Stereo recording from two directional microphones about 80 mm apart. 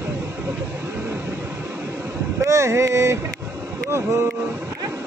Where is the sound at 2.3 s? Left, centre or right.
Right.